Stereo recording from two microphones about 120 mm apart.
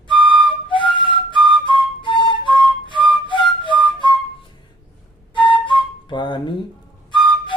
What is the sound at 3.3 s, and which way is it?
Music, 40° left (ahead or behind).